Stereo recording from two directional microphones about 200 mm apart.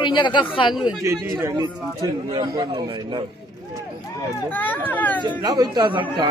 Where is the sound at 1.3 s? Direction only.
15° right (ahead or behind).